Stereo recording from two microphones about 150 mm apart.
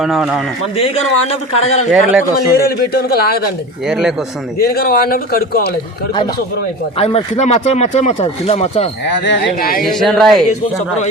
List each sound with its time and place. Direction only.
0.0 s speech: 5° right (ahead or behind)
0.8 s speech: 40° left (ahead or behind)
2.5 s a man's voice: 85° left
3.8 s speech: 5° right (ahead or behind)
4.5 s a man's voice: 90° left
7.0 s speech: 45° left (ahead or behind)
9.6 s speech: 75° left (ahead or behind)
9.8 s speech: centre (ahead or behind)